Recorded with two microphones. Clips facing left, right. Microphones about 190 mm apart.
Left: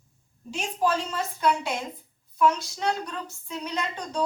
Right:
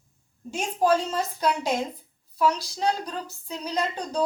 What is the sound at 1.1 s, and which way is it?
A woman's voice, 40° right (ahead or behind).